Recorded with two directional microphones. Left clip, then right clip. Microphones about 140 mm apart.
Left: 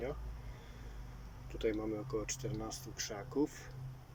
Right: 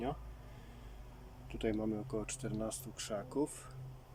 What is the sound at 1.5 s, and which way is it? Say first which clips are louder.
Speech: left 1 dB; 25° right (ahead or behind).